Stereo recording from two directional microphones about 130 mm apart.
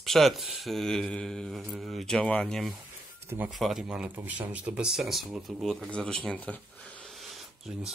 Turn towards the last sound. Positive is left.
turn(degrees=-5)  # may be behind; listen again after turning